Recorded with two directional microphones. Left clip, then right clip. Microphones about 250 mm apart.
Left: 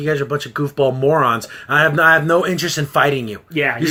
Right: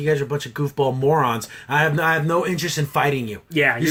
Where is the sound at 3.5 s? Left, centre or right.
Right.